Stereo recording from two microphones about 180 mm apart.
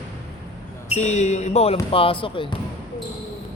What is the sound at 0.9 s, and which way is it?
Speech, 40° left (ahead or behind).